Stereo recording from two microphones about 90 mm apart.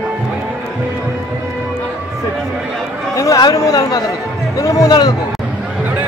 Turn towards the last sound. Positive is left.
turn(degrees=40)  # may be behind; listen again after turning